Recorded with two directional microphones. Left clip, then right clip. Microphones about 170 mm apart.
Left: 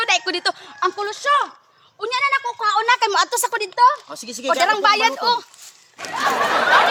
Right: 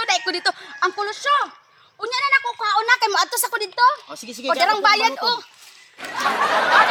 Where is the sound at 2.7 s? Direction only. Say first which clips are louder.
Even; 40° left (ahead or behind).